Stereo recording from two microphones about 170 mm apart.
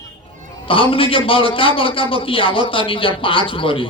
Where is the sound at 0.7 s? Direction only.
30° left (ahead or behind).